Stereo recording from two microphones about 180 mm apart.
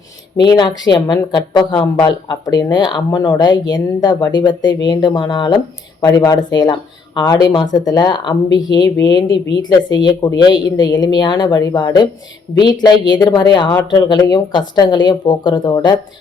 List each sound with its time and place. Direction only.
0.3 s a woman's voice: 25° left (ahead or behind)
13.7 s speech: 15° left (ahead or behind)
14.1 s a woman's voice: 25° left (ahead or behind)